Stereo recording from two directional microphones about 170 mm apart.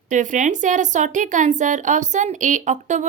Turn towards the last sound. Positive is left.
turn(degrees=-45)  # may be behind; listen again after turning